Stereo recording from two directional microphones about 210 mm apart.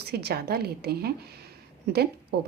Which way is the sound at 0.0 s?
50° right (ahead or behind).